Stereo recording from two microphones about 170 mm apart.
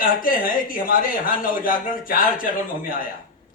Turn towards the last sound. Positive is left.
turn(degrees=55)  # may be behind; listen again after turning